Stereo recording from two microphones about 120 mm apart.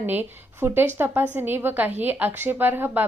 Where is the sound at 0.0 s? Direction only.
15° right (ahead or behind).